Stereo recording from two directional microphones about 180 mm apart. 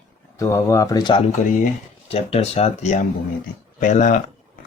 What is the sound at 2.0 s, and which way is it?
Speech, 35° left (ahead or behind).